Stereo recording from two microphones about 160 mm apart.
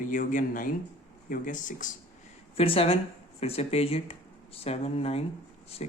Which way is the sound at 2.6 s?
35° left (ahead or behind).